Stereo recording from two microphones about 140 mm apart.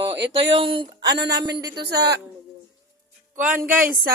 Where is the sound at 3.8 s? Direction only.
90° right.